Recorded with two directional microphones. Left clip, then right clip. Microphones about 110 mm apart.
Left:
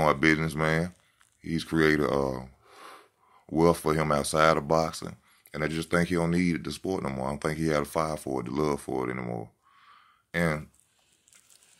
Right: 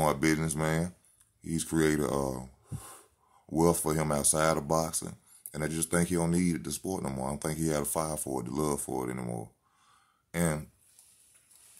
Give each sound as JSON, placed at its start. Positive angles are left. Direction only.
{"t": 0.0, "sound": "speech", "side_deg": -30}